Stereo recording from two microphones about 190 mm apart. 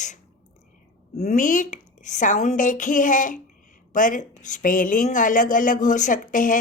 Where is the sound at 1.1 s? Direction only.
40° left (ahead or behind).